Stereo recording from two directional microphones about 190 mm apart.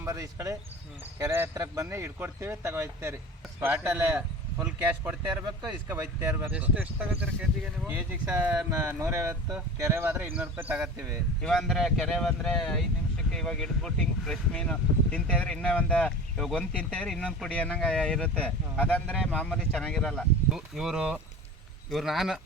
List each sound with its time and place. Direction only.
0.0 s speech: 15° right (ahead or behind)
7.9 s speech: 10° right (ahead or behind)
11.4 s speech: 5° left (ahead or behind)